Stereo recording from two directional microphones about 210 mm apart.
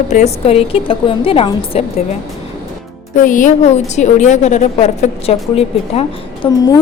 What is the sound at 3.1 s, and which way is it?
A woman's voice, 40° left (ahead or behind).